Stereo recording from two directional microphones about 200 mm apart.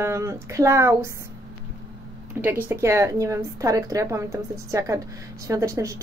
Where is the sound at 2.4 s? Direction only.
10° right (ahead or behind).